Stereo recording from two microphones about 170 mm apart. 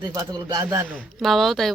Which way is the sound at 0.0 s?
20° right (ahead or behind).